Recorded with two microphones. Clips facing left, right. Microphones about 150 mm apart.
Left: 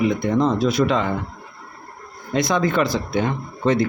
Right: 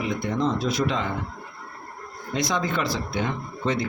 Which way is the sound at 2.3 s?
55° left (ahead or behind).